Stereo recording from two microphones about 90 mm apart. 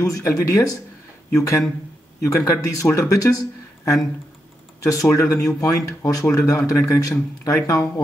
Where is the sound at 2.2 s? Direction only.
35° left (ahead or behind).